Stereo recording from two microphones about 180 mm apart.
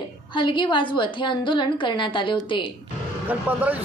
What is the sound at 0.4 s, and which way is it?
A woman's voice, 25° left (ahead or behind).